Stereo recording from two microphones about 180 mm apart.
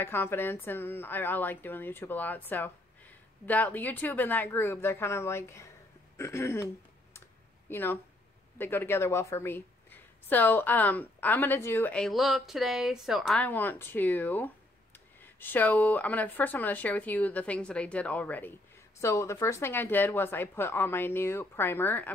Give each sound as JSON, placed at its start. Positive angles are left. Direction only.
{"t": 0.0, "sound": "a woman's voice", "side_deg": 10}
{"t": 7.7, "sound": "a woman's voice", "side_deg": 10}